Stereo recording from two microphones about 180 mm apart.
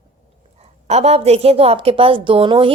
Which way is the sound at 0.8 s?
35° right (ahead or behind).